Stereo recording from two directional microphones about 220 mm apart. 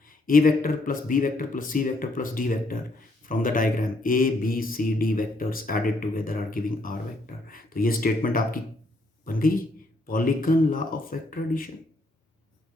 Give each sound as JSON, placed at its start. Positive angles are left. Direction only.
{"t": 0.0, "sound": "speech", "side_deg": 40}